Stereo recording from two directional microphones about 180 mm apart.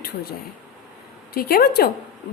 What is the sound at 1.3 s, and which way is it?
Speech, 60° left (ahead or behind).